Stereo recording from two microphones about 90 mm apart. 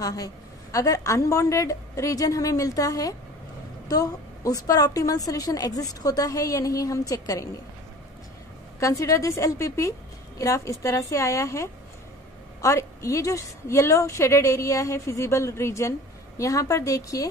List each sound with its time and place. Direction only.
0.0 s a woman's voice: 40° left (ahead or behind)
8.7 s a woman's voice: 35° left (ahead or behind)